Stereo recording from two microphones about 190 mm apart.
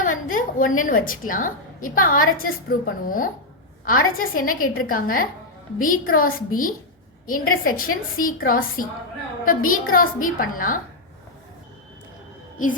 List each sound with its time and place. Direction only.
0.0 s a woman's voice: 45° left (ahead or behind)